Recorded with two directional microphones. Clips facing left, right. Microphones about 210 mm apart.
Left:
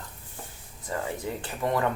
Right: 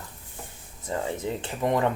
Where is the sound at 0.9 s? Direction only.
20° right (ahead or behind).